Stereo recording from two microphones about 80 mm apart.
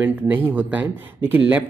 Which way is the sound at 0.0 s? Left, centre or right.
Right.